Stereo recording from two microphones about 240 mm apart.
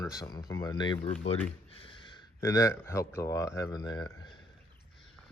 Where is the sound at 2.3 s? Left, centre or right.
Centre.